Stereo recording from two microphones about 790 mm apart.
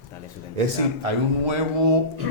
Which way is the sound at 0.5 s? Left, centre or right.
Right.